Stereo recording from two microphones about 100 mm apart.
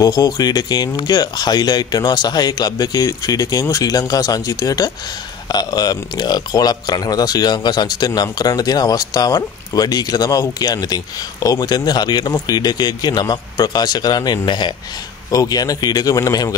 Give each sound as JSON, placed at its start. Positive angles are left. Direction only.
{"t": 0.0, "sound": "speech", "side_deg": 35}